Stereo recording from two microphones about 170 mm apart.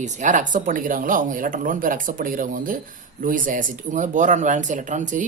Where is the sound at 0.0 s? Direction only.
45° right (ahead or behind).